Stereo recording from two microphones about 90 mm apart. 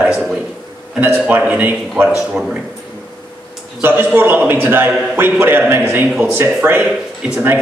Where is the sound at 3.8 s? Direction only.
25° right (ahead or behind).